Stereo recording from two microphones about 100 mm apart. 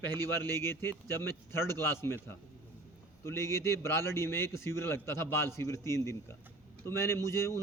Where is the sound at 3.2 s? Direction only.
25° left (ahead or behind).